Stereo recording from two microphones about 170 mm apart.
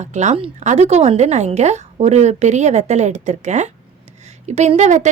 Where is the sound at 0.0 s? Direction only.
45° right (ahead or behind).